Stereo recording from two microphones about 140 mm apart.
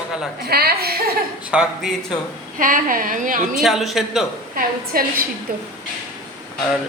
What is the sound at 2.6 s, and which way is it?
Speech, 80° right.